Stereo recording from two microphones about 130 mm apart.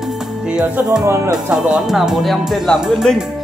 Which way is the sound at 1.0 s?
20° right (ahead or behind).